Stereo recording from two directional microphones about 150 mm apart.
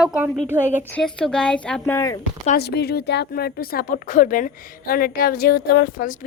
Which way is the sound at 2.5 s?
90° left.